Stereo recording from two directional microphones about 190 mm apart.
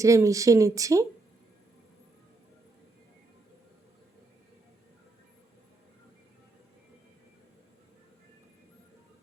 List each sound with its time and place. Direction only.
0.0 s speech: 15° right (ahead or behind)